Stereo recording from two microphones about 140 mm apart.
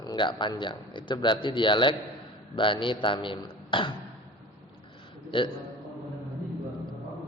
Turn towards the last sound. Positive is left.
turn(degrees=35)  # may be behind; listen again after turning